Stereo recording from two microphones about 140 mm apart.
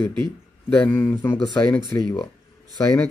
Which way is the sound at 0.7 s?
10° left (ahead or behind).